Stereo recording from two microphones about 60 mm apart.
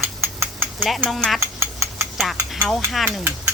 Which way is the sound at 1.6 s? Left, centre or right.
Right.